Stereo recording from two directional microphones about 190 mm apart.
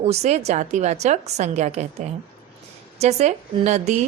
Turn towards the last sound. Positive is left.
turn(degrees=-35)  # may be behind; listen again after turning